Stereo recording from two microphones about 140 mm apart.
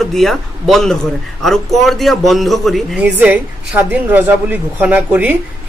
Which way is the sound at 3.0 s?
10° right (ahead or behind).